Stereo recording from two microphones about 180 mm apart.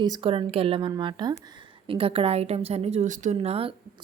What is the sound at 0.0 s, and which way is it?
A woman's voice, 25° right (ahead or behind).